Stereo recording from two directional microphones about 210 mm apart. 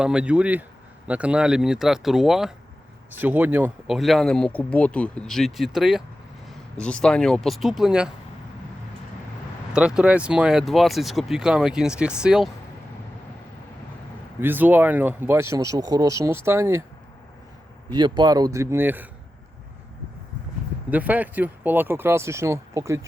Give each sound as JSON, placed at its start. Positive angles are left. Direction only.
{"t": 0.0, "sound": "speech", "side_deg": -5}
{"t": 9.7, "sound": "speech", "side_deg": -5}
{"t": 14.4, "sound": "speech", "side_deg": -10}
{"t": 17.9, "sound": "speech", "side_deg": -20}
{"t": 20.9, "sound": "speech", "side_deg": -10}